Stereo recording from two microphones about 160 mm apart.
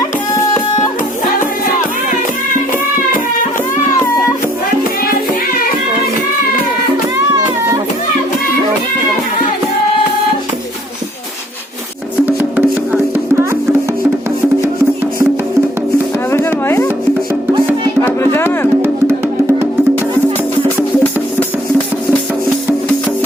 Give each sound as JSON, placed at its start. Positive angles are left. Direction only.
{"t": 12.2, "sound": "music", "side_deg": -10}
{"t": 16.3, "sound": "chopping", "side_deg": 15}
{"t": 18.0, "sound": "music", "side_deg": 15}